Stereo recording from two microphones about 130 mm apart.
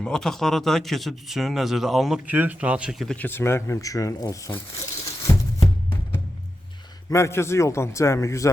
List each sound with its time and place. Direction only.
0.0 s speech: 5° left (ahead or behind)
3.1 s speech: 15° left (ahead or behind)
5.0 s heart sounds: 25° left (ahead or behind)
7.1 s speech: 20° left (ahead or behind)